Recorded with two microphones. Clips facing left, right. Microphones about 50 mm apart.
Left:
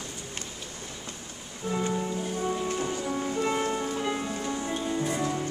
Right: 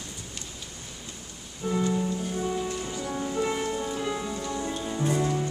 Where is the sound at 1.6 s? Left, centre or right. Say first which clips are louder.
Right 2 dB; left.